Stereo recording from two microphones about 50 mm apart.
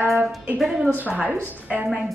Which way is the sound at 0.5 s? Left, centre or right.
Centre.